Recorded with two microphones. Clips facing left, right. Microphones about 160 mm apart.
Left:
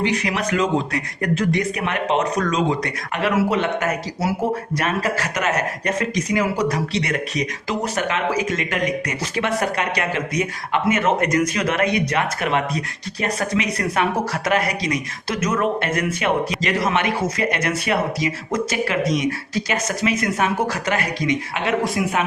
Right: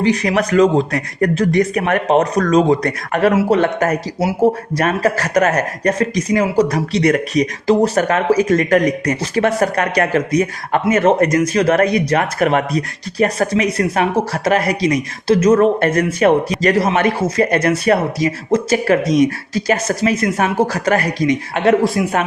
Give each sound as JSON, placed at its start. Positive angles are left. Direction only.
{"t": 0.0, "sound": "speech", "side_deg": -40}